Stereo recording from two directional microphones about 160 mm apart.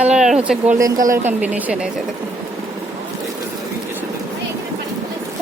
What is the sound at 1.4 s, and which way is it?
Speech, 10° right (ahead or behind).